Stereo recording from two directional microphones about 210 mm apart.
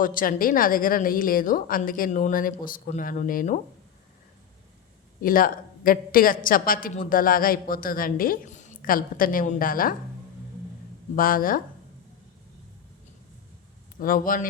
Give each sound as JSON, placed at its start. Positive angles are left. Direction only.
{"t": 0.0, "sound": "a woman's voice", "side_deg": 40}
{"t": 5.2, "sound": "a woman's voice", "side_deg": 40}
{"t": 11.1, "sound": "a woman's voice", "side_deg": 40}
{"t": 14.0, "sound": "a woman's voice", "side_deg": 40}